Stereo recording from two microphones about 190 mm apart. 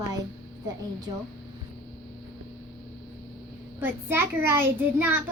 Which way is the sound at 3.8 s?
10° right (ahead or behind).